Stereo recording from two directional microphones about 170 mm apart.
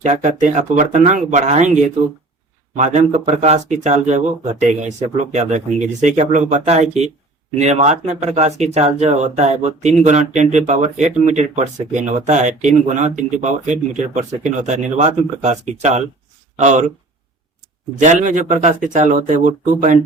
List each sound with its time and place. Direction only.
0.0 s speech: 45° right (ahead or behind)
18.0 s speech: 45° right (ahead or behind)